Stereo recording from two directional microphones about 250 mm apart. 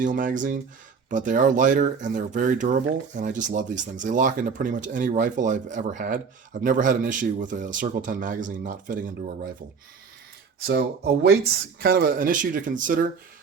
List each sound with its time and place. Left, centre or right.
0.0 s speech: right
10.7 s speech: right